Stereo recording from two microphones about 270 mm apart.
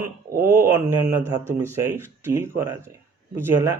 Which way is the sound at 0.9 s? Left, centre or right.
Centre.